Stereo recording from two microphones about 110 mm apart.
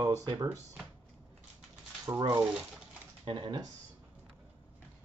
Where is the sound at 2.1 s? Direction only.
30° right (ahead or behind).